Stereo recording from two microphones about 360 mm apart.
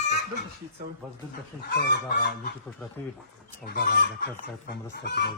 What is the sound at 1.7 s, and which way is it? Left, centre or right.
Speech, left.